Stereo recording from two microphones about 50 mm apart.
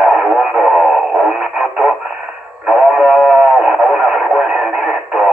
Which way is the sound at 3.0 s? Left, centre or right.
Centre.